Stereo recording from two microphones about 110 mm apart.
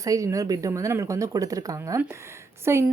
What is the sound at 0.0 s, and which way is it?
Speech, 30° right (ahead or behind).